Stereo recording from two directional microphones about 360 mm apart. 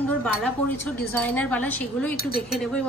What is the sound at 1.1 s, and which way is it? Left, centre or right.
A woman's voice, centre.